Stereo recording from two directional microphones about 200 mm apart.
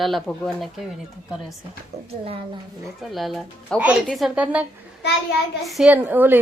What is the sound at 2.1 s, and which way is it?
Speech, 30° right (ahead or behind).